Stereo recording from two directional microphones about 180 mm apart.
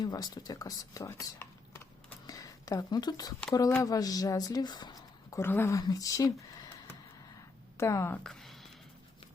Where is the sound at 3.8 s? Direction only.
20° left (ahead or behind).